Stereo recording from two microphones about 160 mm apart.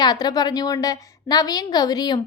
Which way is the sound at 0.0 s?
25° left (ahead or behind).